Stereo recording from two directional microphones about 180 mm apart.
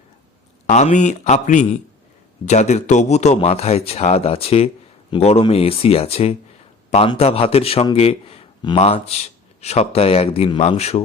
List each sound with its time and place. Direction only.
0.7 s a man's voice: 40° left (ahead or behind)